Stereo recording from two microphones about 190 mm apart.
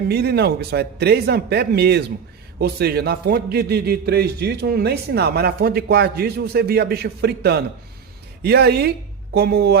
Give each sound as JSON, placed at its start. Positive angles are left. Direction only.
{"t": 0.1, "sound": "a man's voice", "side_deg": -55}